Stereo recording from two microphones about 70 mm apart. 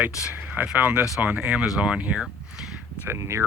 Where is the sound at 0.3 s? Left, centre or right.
Right.